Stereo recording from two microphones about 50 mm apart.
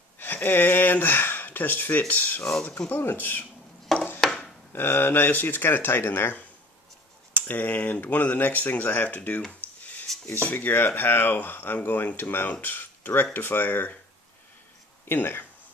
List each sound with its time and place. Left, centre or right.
0.2 s speech: left
4.2 s a sound: centre
4.7 s speech: left
7.4 s speech: left
10.1 s a sound: centre
10.4 s speech: left
15.0 s speech: left